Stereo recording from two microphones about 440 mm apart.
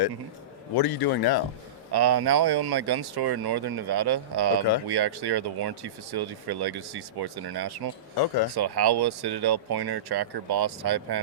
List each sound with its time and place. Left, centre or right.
0.8 s a man's voice: left
1.9 s speech: right
8.1 s a man's voice: left
8.5 s speech: right